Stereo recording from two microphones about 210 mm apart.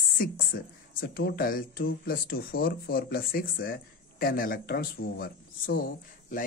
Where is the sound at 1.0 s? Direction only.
50° left (ahead or behind).